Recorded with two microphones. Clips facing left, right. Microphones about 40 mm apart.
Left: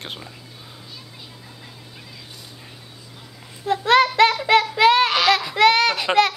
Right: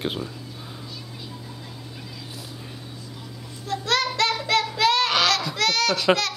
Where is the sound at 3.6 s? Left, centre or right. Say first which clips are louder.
Left 8 dB; left.